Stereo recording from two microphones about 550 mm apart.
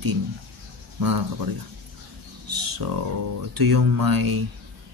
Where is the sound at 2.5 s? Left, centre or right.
Right.